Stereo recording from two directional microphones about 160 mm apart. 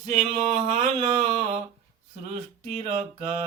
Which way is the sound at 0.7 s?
45° right (ahead or behind).